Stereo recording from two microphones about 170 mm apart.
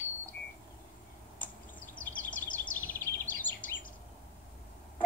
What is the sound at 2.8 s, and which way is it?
Bird vocalization, 10° left (ahead or behind).